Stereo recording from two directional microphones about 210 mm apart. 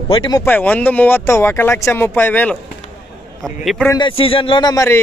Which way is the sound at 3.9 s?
20° left (ahead or behind).